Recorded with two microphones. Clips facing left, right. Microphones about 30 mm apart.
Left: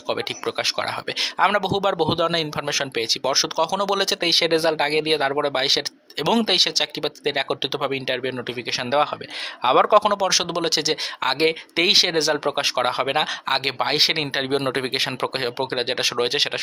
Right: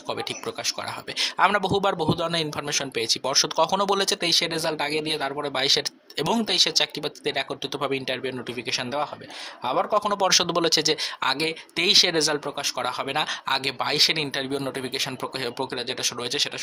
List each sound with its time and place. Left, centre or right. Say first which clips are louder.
0.1 s speech: left 5 dB; left
1.2 s speech: left 1 dB; centre
2.0 s speech: left 4 dB; left
2.3 s speech: left 3 dB; centre
5.5 s speech: left 2 dB; centre
7.8 s speech: left 3 dB; centre
9.6 s speech: left 8 dB; left
10.2 s speech: even; centre
12.5 s speech: left 6 dB; left
13.1 s speech: left 3 dB; centre
14.5 s speech: left 6 dB; left
15.4 s speech: left 3 dB; left